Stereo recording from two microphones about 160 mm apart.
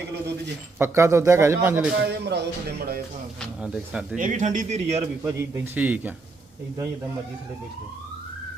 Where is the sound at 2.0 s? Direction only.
90° right.